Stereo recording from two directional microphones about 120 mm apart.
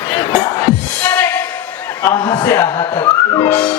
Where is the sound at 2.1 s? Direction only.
35° left (ahead or behind).